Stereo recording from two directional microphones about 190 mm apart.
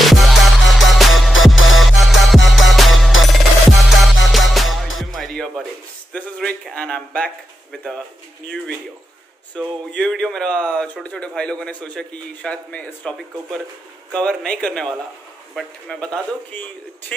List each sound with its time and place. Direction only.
0.0 s music: centre (ahead or behind)
1.5 s music: 90° left
1.8 s music: centre (ahead or behind)
6.1 s a sound: 5° left (ahead or behind)
7.7 s speech: 5° left (ahead or behind)
9.6 s speech: 5° left (ahead or behind)
14.1 s speech: 5° left (ahead or behind)